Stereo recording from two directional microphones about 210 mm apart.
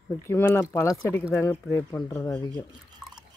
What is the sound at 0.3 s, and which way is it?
Speech, 10° left (ahead or behind).